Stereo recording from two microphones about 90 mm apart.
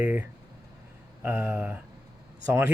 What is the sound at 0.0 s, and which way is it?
Speech, 20° right (ahead or behind).